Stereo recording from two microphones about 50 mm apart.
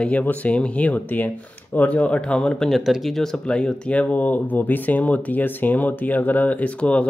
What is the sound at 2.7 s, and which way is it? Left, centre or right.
Speech, centre.